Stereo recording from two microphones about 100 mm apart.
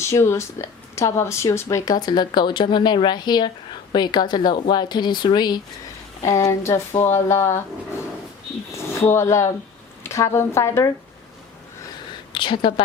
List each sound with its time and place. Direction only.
0.0 s speech: 25° left (ahead or behind); by 5.5 s 45° left (ahead or behind)
6.2 s speech: 30° left (ahead or behind)
8.7 s speech: 25° left (ahead or behind)
12.3 s a woman's voice: 55° left (ahead or behind)